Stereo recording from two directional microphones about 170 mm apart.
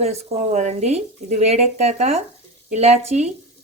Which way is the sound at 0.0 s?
40° right (ahead or behind).